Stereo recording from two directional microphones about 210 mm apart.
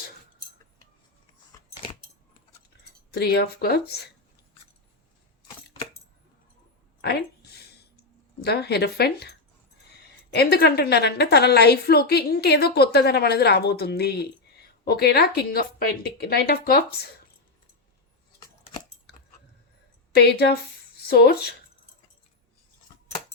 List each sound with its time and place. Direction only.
3.1 s a woman's voice: 50° left (ahead or behind)
7.0 s a sound: 50° left (ahead or behind)
8.4 s a woman's voice: 50° left (ahead or behind)
20.1 s speech: 50° left (ahead or behind)